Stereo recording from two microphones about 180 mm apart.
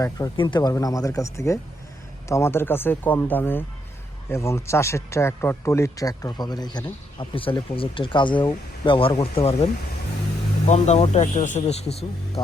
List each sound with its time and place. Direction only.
0.0 s a man's voice: 20° left (ahead or behind)
10.7 s speech: 40° left (ahead or behind)